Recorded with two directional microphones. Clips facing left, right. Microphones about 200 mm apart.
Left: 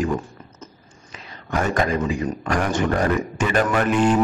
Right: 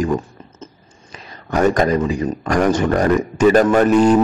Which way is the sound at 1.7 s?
40° right (ahead or behind).